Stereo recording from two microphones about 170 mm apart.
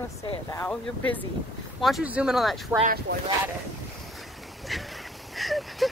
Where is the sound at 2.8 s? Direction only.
60° right (ahead or behind).